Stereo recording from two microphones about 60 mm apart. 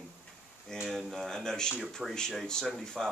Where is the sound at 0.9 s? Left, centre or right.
Centre.